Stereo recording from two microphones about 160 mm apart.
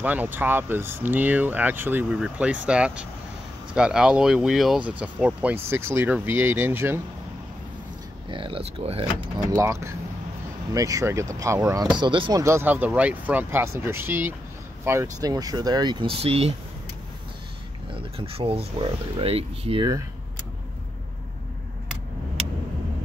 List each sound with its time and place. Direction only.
0.0 s speech: 10° right (ahead or behind)
8.3 s speech: 30° right (ahead or behind)
9.6 s speech: 20° right (ahead or behind)
12.0 s speech: 30° right (ahead or behind)
17.9 s speech: 35° right (ahead or behind)